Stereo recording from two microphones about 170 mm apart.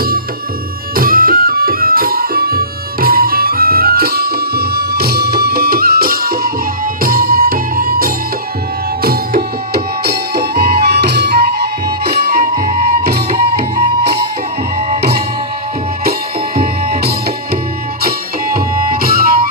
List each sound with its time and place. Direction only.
0.9 s music: 55° right (ahead or behind)
16.6 s music: 65° right (ahead or behind)